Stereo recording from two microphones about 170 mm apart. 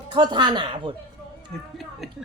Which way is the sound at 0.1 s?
25° right (ahead or behind).